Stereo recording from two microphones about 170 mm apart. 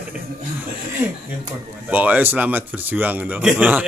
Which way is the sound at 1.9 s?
10° right (ahead or behind).